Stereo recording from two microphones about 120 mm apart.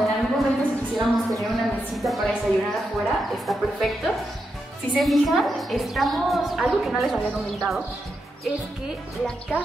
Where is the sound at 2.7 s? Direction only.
Centre (ahead or behind).